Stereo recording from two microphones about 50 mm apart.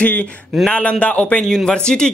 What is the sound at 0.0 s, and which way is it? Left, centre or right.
A man's voice, left.